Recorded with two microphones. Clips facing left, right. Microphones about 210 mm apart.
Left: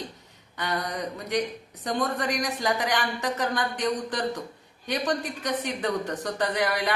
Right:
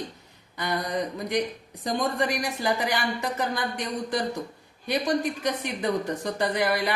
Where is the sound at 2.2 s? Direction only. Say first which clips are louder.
Right 1 dB; 10° right (ahead or behind).